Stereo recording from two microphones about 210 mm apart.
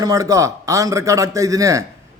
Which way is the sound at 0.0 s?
15° right (ahead or behind).